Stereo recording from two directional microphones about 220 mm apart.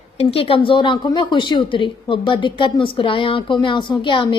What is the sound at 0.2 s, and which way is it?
A woman's voice, 25° left (ahead or behind).